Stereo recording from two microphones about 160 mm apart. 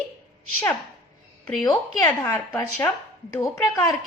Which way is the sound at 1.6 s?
25° left (ahead or behind).